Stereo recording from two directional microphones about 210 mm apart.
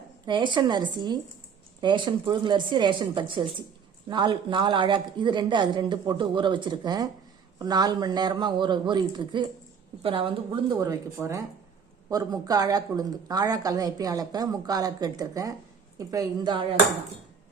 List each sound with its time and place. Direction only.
0.3 s speech: 20° right (ahead or behind)